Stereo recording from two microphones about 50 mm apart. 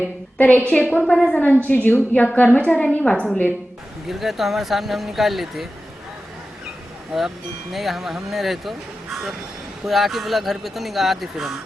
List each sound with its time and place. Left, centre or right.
0.3 s a woman's voice: left
1.0 s a woman's voice: centre
1.3 s a woman's voice: left
4.1 s speech: centre
7.1 s speech: centre